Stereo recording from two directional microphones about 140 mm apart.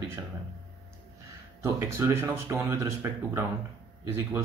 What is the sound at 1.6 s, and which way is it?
Speech, 20° right (ahead or behind).